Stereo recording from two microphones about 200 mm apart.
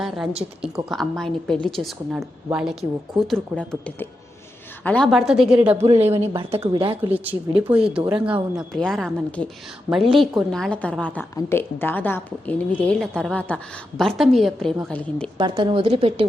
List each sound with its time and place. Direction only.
0.6 s a woman's voice: centre (ahead or behind)
5.8 s a woman's voice: 30° right (ahead or behind)
7.1 s a woman's voice: 10° right (ahead or behind)
15.4 s a woman's voice: 25° right (ahead or behind)